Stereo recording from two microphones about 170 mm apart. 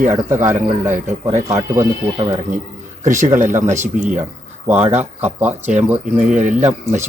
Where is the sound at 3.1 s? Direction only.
45° right (ahead or behind).